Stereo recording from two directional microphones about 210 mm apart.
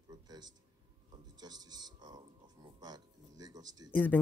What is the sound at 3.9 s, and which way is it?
Speech, 10° left (ahead or behind).